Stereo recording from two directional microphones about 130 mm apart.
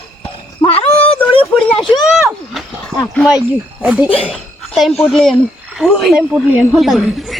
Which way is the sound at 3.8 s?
10° right (ahead or behind).